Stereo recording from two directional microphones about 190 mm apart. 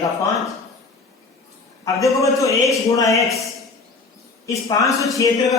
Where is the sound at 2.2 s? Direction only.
15° left (ahead or behind).